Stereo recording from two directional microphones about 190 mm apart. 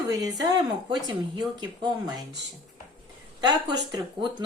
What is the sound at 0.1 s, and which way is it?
Speech, 20° right (ahead or behind).